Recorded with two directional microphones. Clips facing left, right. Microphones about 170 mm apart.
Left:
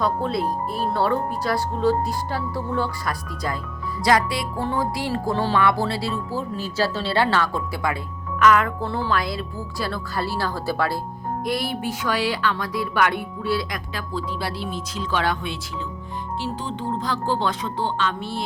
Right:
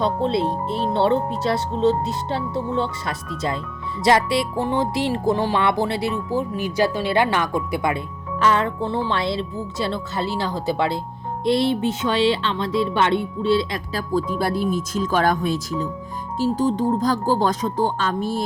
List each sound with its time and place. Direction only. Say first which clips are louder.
0.0 s music: right 3 dB; 25° right (ahead or behind)
13.9 s speech: right 8 dB; 45° right (ahead or behind)